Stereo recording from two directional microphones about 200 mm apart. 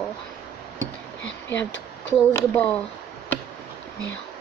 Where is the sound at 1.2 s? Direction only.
65° left (ahead or behind).